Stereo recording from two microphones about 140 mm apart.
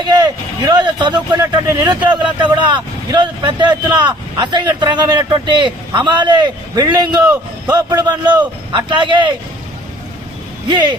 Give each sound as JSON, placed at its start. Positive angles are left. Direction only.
{"t": 0.0, "sound": "speech", "side_deg": -30}
{"t": 10.7, "sound": "speech", "side_deg": -30}